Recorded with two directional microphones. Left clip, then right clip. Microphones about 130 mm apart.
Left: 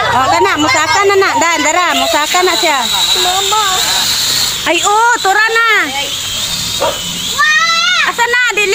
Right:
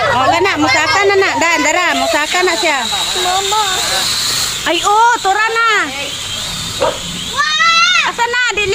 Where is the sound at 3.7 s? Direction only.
40° right (ahead or behind).